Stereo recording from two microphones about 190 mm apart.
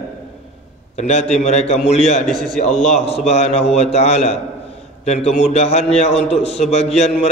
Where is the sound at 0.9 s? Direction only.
35° left (ahead or behind).